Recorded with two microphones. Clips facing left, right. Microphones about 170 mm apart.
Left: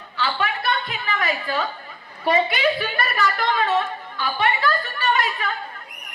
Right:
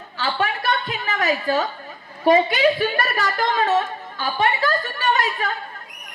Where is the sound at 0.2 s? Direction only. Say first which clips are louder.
Right 1 dB; 45° right (ahead or behind).